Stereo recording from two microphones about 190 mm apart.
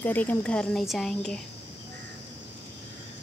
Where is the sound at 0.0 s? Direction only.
10° left (ahead or behind).